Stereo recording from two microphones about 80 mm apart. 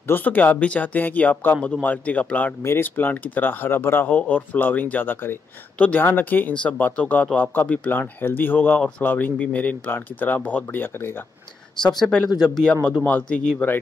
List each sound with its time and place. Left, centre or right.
0.0 s speech: left
12.0 s a man's voice: centre